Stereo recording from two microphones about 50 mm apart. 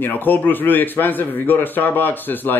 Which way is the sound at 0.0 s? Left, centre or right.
Left.